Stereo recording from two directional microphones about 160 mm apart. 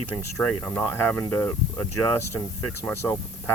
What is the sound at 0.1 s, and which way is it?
Speech, 15° left (ahead or behind).